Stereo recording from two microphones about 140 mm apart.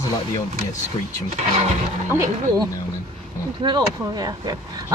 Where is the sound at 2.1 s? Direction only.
20° right (ahead or behind).